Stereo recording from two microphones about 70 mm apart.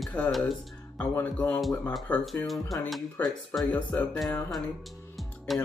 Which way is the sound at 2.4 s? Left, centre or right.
Centre.